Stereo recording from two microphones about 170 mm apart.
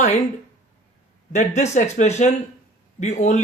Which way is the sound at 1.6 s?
40° left (ahead or behind).